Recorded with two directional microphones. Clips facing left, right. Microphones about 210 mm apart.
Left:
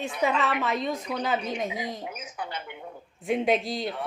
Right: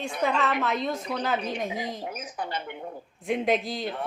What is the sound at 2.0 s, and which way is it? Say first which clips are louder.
Speech: right 2 dB; 40° right (ahead or behind).